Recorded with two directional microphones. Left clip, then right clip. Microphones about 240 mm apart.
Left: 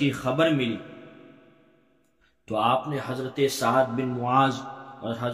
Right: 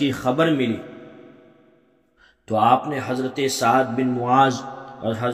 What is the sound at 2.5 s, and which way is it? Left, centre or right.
A man's voice, right.